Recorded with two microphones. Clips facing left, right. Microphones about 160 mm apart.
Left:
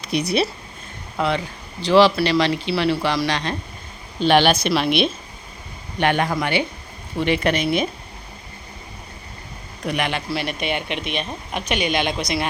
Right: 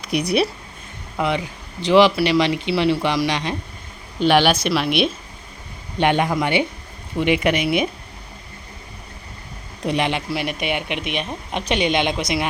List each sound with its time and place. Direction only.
0.1 s speech: 15° right (ahead or behind)
6.0 s a woman's voice: 20° right (ahead or behind)
9.8 s speech: 25° right (ahead or behind)
11.6 s a woman's voice: 25° right (ahead or behind)